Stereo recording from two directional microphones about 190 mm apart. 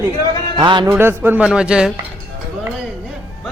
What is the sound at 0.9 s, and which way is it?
A man's voice, 10° right (ahead or behind).